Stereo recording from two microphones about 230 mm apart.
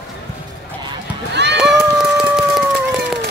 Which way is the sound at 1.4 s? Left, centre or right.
Right.